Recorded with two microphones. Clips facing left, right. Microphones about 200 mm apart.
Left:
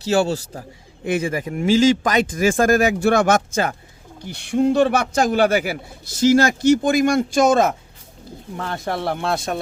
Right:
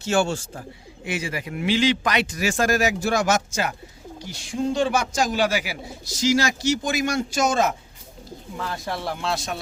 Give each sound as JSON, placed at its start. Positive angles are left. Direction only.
{"t": 0.0, "sound": "a man's voice", "side_deg": 35}
{"t": 1.0, "sound": "speech", "side_deg": 55}